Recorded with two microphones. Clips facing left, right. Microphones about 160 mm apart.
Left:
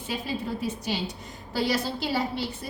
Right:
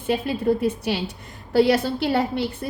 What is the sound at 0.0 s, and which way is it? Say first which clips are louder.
A woman's voice: right 9 dB; 55° right (ahead or behind).